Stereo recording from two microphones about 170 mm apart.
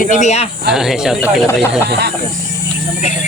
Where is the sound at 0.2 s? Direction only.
40° left (ahead or behind).